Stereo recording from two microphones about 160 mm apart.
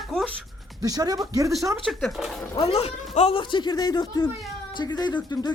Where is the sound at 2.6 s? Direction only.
40° left (ahead or behind).